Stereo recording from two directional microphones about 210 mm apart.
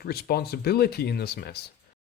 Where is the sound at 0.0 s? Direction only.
50° left (ahead or behind).